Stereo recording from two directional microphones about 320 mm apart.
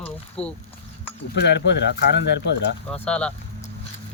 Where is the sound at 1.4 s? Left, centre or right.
Left.